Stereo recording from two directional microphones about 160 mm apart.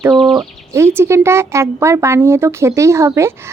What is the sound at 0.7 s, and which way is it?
A woman's voice, 15° right (ahead or behind).